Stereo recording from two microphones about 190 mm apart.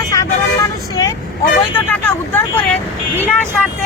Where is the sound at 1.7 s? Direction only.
10° left (ahead or behind).